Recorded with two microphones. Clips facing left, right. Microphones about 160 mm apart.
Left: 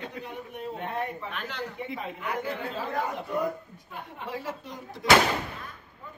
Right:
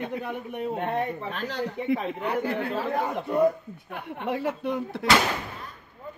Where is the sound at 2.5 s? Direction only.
60° right (ahead or behind).